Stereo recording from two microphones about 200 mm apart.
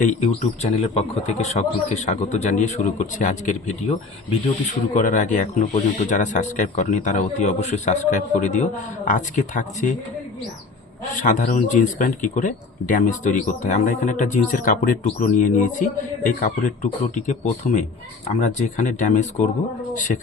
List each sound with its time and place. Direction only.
0.0 s speech: 35° left (ahead or behind)
11.2 s speech: 40° left (ahead or behind)